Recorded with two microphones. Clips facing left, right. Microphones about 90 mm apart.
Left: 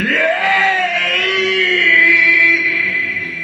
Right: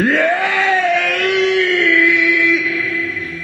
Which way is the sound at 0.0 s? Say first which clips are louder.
Right 1 dB; 30° right (ahead or behind).